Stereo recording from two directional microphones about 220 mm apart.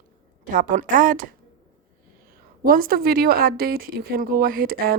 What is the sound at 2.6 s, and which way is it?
Speech, 40° right (ahead or behind).